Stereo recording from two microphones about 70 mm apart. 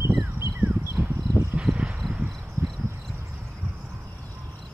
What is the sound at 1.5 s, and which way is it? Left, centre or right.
Insect, centre.